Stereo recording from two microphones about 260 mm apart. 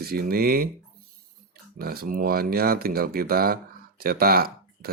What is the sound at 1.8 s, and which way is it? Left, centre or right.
Speech, right.